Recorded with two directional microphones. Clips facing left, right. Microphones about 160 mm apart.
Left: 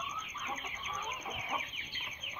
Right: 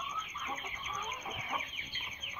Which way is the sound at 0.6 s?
10° left (ahead or behind).